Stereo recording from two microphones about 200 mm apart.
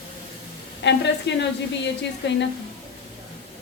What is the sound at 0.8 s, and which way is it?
A woman's voice, 60° left (ahead or behind).